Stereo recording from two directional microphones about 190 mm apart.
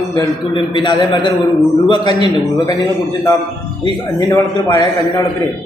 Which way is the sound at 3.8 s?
20° left (ahead or behind).